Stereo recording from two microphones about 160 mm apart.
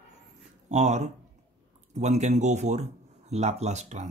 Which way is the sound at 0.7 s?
45° right (ahead or behind).